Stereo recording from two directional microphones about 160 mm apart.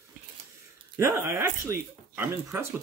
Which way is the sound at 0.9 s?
15° right (ahead or behind).